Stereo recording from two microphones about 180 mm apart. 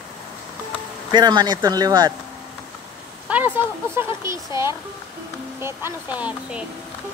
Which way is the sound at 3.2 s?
10° right (ahead or behind).